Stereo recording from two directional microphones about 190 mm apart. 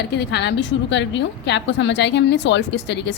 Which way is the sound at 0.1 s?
65° left (ahead or behind).